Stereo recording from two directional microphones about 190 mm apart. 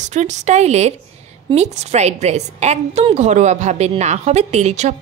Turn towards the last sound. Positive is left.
turn(degrees=-35)  # may be behind; listen again after turning